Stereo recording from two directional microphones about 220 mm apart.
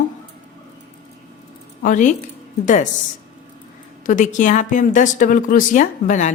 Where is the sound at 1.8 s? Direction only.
35° left (ahead or behind).